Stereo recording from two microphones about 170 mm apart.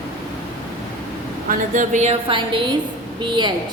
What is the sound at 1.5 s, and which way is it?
Speech, 45° right (ahead or behind).